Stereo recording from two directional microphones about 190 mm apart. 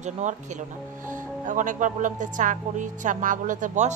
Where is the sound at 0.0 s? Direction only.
40° right (ahead or behind).